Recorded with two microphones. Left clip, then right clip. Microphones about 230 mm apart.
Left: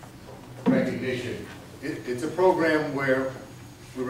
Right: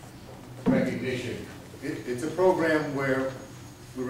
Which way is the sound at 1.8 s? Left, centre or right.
Centre.